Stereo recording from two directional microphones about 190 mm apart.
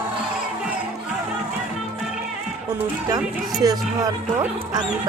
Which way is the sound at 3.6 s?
20° right (ahead or behind).